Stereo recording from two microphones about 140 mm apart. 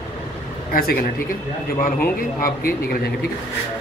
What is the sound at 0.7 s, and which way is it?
Speech, 90° left.